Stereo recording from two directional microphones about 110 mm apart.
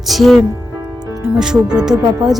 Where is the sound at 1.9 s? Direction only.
35° right (ahead or behind).